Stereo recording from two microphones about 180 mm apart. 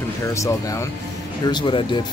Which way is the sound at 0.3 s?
15° left (ahead or behind).